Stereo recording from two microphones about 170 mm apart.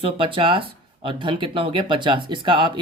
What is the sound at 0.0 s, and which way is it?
Speech, 30° right (ahead or behind).